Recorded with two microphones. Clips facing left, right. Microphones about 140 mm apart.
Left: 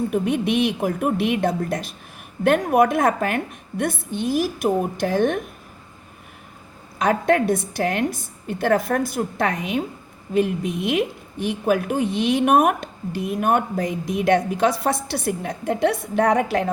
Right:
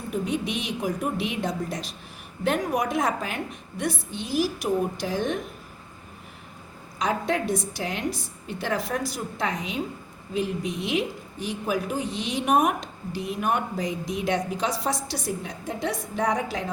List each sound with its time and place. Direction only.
0.1 s a woman's voice: 60° left (ahead or behind)
7.0 s a woman's voice: 60° left (ahead or behind)